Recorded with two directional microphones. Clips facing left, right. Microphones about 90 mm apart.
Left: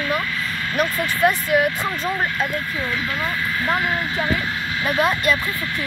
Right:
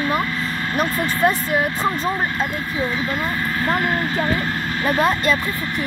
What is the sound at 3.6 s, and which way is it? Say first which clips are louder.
Speech: right 2 dB; 40° right (ahead or behind).